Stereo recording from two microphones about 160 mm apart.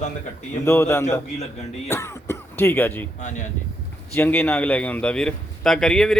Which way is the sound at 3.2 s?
50° left (ahead or behind).